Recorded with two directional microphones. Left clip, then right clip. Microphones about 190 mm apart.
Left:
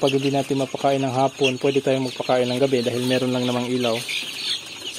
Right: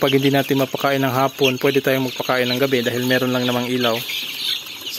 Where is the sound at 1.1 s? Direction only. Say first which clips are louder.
Right 2 dB; 25° right (ahead or behind).